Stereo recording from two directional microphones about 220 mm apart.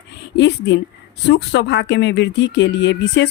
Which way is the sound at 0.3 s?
55° left (ahead or behind).